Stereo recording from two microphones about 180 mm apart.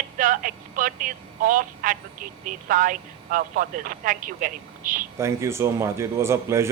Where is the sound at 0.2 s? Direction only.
50° right (ahead or behind).